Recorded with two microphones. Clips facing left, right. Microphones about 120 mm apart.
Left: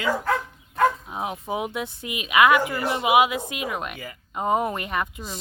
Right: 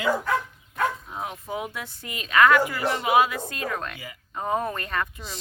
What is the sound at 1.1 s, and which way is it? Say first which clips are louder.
Speech: left 3 dB; 20° left (ahead or behind).